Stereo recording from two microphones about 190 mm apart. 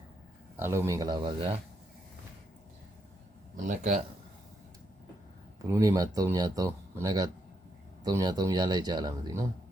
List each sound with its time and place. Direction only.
0.6 s speech: 15° right (ahead or behind)
3.5 s speech: 45° right (ahead or behind)
5.6 s speech: 15° right (ahead or behind)